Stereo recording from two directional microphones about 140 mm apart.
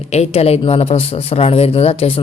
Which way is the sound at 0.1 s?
50° left (ahead or behind).